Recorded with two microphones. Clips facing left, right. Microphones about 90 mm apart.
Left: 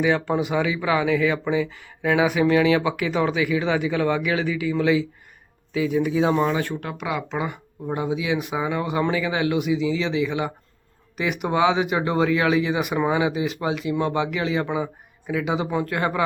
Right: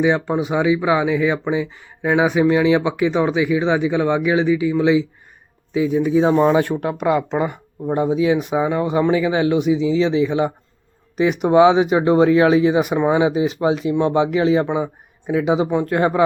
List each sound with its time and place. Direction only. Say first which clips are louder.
0.0 s speech: right 3 dB; 20° right (ahead or behind)
6.9 s speech: right 11 dB; 45° right (ahead or behind)
7.2 s speech: right 7 dB; centre (ahead or behind)
7.9 s speech: right 7 dB; 35° right (ahead or behind)
8.5 s speech: right 6 dB; 25° right (ahead or behind)
13.3 s speech: right 7 dB; 35° right (ahead or behind)
15.4 s speech: right 8 dB; 5° right (ahead or behind)
15.7 s speech: right 6 dB; 25° right (ahead or behind)